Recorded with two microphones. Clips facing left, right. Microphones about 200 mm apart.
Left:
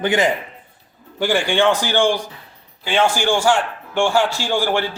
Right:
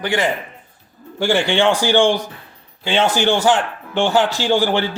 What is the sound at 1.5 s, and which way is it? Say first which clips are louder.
Speech: right 2 dB; 15° right (ahead or behind).